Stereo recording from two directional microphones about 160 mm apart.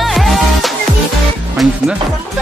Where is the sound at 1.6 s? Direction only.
Centre (ahead or behind).